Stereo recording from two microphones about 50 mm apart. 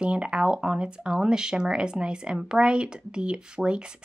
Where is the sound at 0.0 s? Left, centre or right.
Centre.